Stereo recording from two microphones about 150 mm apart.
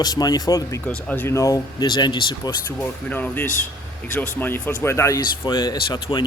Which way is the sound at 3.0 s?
10° left (ahead or behind).